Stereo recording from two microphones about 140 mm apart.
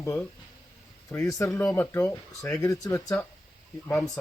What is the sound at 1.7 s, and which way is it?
Speech, 20° left (ahead or behind).